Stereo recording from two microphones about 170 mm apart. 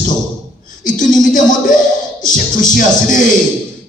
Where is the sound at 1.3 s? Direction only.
50° left (ahead or behind).